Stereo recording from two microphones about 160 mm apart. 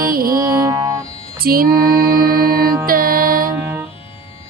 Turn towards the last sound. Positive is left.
turn(degrees=-15)  # may be behind; listen again after turning